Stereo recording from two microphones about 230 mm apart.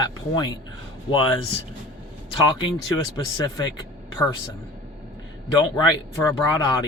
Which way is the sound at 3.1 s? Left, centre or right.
Centre.